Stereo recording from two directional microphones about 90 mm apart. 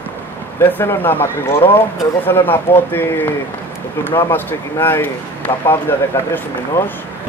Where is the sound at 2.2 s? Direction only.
20° left (ahead or behind).